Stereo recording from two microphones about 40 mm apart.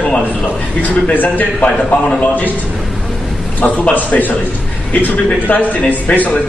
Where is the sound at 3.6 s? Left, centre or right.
Left.